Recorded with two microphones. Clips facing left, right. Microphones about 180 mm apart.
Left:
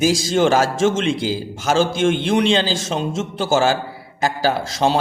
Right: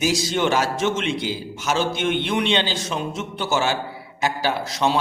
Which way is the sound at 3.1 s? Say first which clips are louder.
Left 7 dB; 90° left.